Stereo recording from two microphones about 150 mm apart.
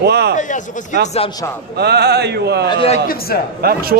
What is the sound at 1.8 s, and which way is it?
Mantra, 90° right.